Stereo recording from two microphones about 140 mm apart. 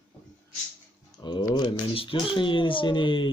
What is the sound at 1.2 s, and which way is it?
Speech, 35° left (ahead or behind).